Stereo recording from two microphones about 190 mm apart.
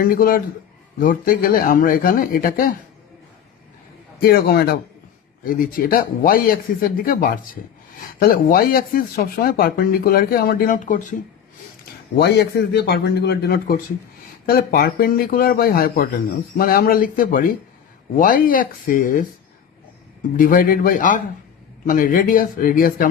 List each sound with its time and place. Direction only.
0.0 s speech: 50° left (ahead or behind)
4.2 s a man's voice: 55° left (ahead or behind)
12.2 s a man's voice: 60° left (ahead or behind)
20.3 s speech: 45° left (ahead or behind)